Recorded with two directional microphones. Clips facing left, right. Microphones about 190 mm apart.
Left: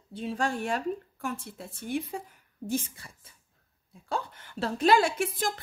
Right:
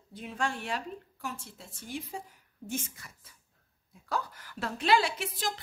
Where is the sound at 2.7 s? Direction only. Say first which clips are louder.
Left 6 dB; 35° left (ahead or behind).